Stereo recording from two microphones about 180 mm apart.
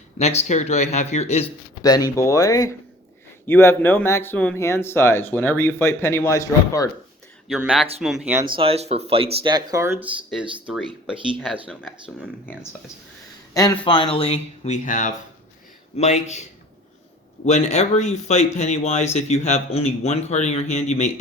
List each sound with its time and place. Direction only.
0.2 s speech: 35° left (ahead or behind)
1.8 s speech: 20° left (ahead or behind)
7.4 s speech: 5° right (ahead or behind)
8.4 s speech: 30° right (ahead or behind); by 10.1 s 15° right (ahead or behind)
10.2 s speech: centre (ahead or behind)
13.5 s speech: 20° left (ahead or behind); by 21.1 s 40° left (ahead or behind)